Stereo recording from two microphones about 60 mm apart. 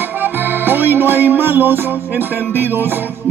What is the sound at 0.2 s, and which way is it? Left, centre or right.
Music, right.